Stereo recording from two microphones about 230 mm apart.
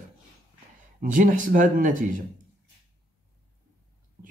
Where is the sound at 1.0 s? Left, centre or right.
Right.